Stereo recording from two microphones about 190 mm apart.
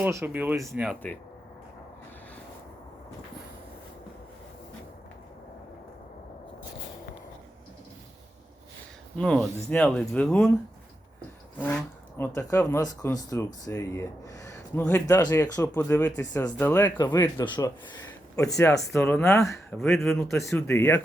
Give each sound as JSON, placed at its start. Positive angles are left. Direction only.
{"t": 0.0, "sound": "speech", "side_deg": -10}
{"t": 9.1, "sound": "speech", "side_deg": 5}
{"t": 11.6, "sound": "speech", "side_deg": 10}